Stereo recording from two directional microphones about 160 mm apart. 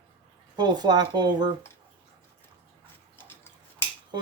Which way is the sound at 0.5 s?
25° right (ahead or behind).